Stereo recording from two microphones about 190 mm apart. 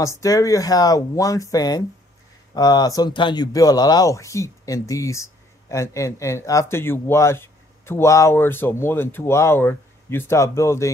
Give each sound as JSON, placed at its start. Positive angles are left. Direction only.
{"t": 0.0, "sound": "speech", "side_deg": 15}